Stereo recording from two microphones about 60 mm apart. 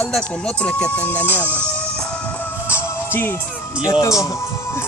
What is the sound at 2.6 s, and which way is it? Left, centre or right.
Music, left.